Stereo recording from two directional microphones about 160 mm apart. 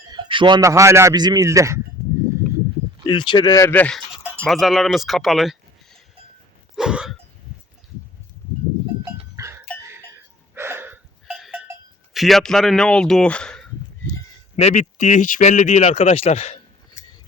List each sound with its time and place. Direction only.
0.0 s speech: 30° right (ahead or behind)
3.1 s speech: 30° left (ahead or behind); by 6.0 s centre (ahead or behind)
6.7 s a sound: 5° right (ahead or behind)
9.3 s livestock: 20° right (ahead or behind)
10.5 s a sound: 15° right (ahead or behind)
11.3 s cowbell: centre (ahead or behind)
12.1 s speech: centre (ahead or behind)
14.5 s a man's voice: 45° left (ahead or behind)